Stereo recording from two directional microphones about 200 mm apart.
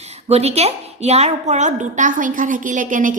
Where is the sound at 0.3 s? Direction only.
30° right (ahead or behind).